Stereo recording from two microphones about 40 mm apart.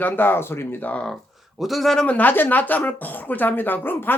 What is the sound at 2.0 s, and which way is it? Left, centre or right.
Speech, left.